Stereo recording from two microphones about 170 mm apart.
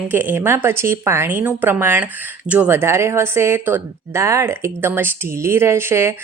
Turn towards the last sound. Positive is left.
turn(degrees=-15)  # may be behind; listen again after turning